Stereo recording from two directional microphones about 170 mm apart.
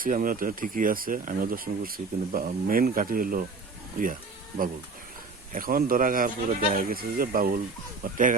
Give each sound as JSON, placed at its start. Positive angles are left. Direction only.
{"t": 0.0, "sound": "speech", "side_deg": -55}